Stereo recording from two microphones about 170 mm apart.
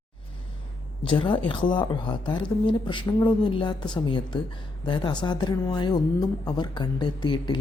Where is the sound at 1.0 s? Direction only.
30° left (ahead or behind).